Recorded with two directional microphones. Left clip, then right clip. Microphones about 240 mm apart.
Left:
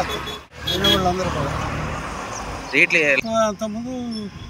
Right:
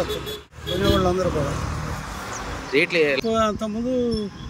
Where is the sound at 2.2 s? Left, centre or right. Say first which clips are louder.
Left 2 dB; left.